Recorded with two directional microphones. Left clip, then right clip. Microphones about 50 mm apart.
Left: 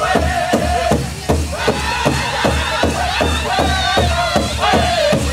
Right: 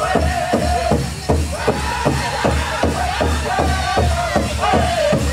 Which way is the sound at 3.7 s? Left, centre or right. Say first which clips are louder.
Left 3 dB; right.